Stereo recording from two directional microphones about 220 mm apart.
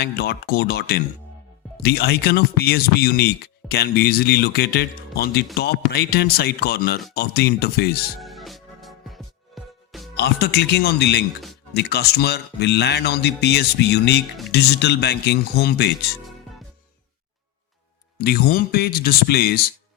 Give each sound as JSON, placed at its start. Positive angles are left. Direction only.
{"t": 0.0, "sound": "speech", "side_deg": 45}
{"t": 8.2, "sound": "music", "side_deg": 0}
{"t": 10.2, "sound": "speech", "side_deg": 45}
{"t": 18.2, "sound": "speech", "side_deg": 45}